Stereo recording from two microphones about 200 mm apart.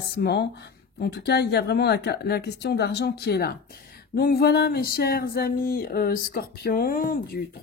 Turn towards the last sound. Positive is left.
turn(degrees=45)  # may be behind; listen again after turning